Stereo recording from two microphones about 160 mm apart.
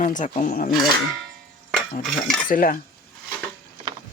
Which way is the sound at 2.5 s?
60° left (ahead or behind).